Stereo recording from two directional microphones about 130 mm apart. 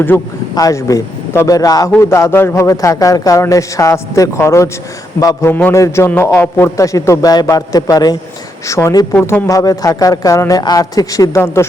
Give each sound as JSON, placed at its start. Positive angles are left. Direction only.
{"t": 0.5, "sound": "a man's voice", "side_deg": 25}
{"t": 5.5, "sound": "a man's voice", "side_deg": 15}
{"t": 9.1, "sound": "speech", "side_deg": 10}
{"t": 9.5, "sound": "a man's voice", "side_deg": 25}